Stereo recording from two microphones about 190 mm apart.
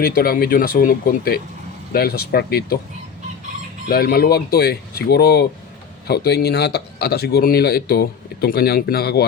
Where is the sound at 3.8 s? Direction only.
50° left (ahead or behind).